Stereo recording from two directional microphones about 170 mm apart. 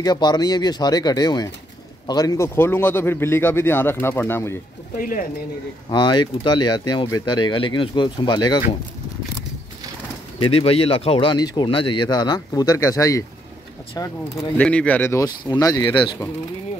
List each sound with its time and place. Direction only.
0.0 s a man's voice: 25° left (ahead or behind)
4.9 s speech: 55° left (ahead or behind)
5.9 s speech: 25° left (ahead or behind)
10.4 s speech: 35° left (ahead or behind)
14.6 s speech: 5° left (ahead or behind); by 16.3 s 30° left (ahead or behind)